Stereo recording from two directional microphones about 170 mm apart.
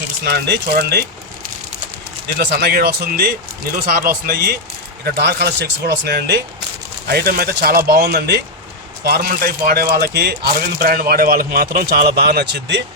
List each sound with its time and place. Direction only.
0.3 s speech: 80° right
2.4 s speech: 65° right (ahead or behind); by 12.8 s 85° right